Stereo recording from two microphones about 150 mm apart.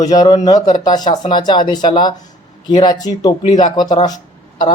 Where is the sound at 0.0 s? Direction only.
25° left (ahead or behind).